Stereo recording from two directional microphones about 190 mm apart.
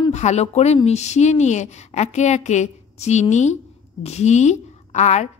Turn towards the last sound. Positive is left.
turn(degrees=35)  # may be behind; listen again after turning